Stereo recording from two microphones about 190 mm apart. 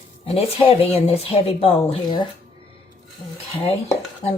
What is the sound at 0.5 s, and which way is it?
Speech, 30° left (ahead or behind).